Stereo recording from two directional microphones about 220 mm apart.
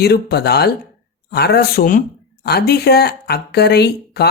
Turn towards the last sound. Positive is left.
turn(degrees=45)  # may be behind; listen again after turning